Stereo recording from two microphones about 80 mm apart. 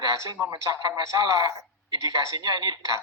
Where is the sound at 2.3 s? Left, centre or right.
Right.